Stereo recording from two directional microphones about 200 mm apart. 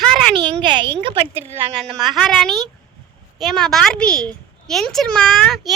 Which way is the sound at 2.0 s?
Centre (ahead or behind).